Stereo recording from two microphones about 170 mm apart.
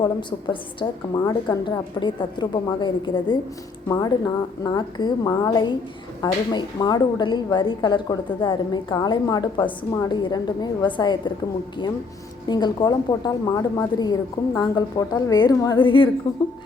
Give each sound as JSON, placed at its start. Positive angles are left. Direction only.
{"t": 0.0, "sound": "a woman's voice", "side_deg": 25}
{"t": 12.5, "sound": "a woman's voice", "side_deg": 25}